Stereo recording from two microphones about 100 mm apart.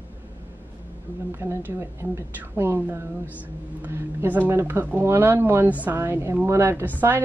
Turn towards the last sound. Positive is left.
turn(degrees=-25)  # may be behind; listen again after turning